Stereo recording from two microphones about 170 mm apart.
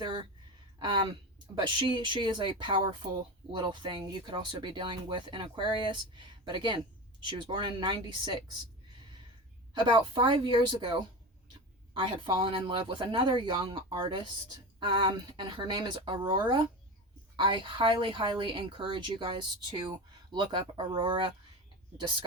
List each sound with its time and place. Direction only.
0.0 s a sound: 30° right (ahead or behind)
0.8 s speech: 25° right (ahead or behind)
9.7 s speech: 25° right (ahead or behind)